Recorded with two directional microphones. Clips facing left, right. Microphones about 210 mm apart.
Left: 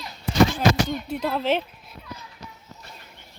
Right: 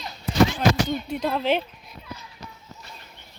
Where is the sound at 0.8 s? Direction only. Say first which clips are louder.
Right 1 dB; centre (ahead or behind).